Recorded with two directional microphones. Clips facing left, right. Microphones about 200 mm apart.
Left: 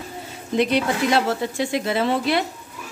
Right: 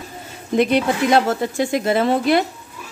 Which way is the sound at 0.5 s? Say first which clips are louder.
Right 3 dB; 50° right (ahead or behind).